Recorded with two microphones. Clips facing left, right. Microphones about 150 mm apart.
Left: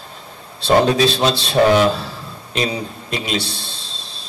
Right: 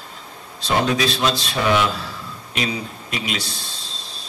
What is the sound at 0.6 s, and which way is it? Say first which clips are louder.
Speech: left 6 dB; 30° left (ahead or behind).